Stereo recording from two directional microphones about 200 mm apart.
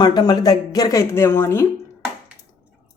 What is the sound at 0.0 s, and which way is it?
Speech, 20° left (ahead or behind).